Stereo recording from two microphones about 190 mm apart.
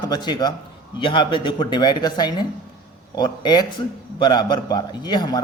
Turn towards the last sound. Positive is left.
turn(degrees=20)  # may be behind; listen again after turning